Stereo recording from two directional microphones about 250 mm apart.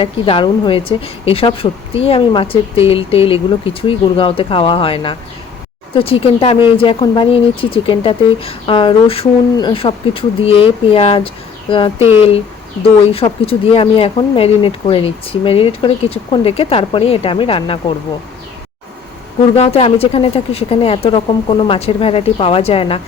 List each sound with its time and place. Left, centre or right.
0.0 s speech: centre
13.1 s speech: left
19.5 s speech: left